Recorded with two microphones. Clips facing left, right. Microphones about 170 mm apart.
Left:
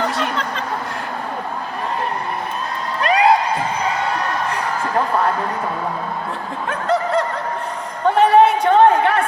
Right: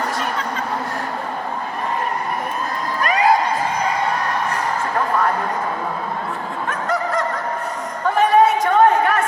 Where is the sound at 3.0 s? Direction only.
25° left (ahead or behind).